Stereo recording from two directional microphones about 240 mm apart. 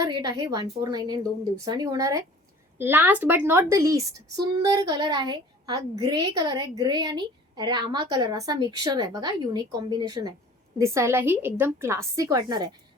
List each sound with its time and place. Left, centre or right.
0.0 s a woman's voice: centre